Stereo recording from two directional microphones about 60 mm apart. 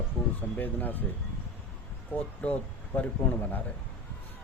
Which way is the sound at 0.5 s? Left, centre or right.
Left.